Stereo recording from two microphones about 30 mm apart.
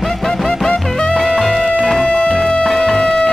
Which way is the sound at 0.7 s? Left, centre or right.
Left.